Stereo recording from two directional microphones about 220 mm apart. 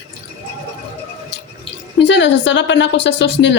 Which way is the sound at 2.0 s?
55° left (ahead or behind).